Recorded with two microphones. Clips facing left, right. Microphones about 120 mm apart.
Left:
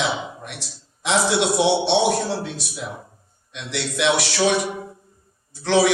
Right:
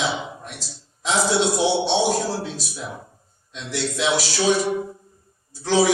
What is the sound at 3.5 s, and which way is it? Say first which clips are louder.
Speech: even; 70° left (ahead or behind).